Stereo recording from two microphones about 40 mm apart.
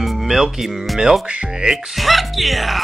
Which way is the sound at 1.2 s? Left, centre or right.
Right.